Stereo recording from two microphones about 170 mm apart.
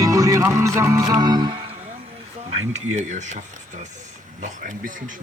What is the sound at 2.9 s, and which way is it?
Speech, 45° right (ahead or behind).